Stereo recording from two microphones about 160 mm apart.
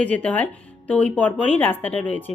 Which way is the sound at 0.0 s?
10° left (ahead or behind).